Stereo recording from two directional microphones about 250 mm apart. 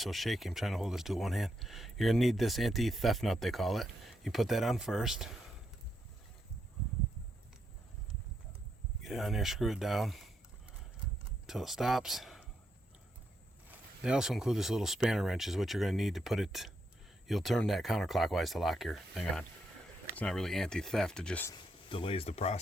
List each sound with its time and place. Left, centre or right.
0.0 s speech: centre
9.0 s speech: centre
11.4 s speech: centre
13.7 s speech: centre
21.8 s speech: left